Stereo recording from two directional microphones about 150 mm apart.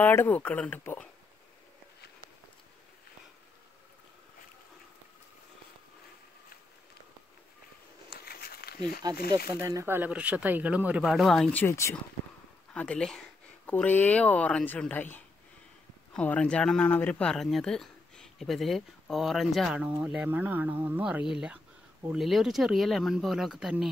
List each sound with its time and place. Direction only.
0.0 s speech: 10° left (ahead or behind)
8.3 s a sound: 90° left
9.5 s speech: 20° right (ahead or behind); by 11.6 s 5° left (ahead or behind)
11.6 s speech: 20° left (ahead or behind)
12.7 s speech: 5° left (ahead or behind)